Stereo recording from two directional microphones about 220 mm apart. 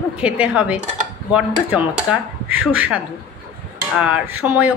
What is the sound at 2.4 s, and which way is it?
Speech, 5° right (ahead or behind).